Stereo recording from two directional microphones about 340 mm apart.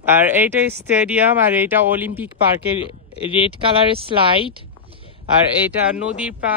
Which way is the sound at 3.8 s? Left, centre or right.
Centre.